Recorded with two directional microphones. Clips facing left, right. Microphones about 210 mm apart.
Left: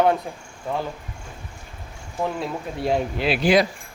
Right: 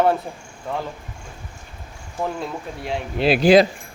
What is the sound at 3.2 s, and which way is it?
Speech, 40° right (ahead or behind).